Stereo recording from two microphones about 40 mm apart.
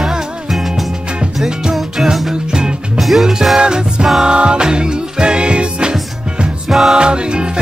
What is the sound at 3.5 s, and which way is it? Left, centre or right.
Music, centre.